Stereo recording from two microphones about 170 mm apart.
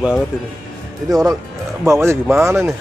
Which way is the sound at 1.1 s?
20° right (ahead or behind).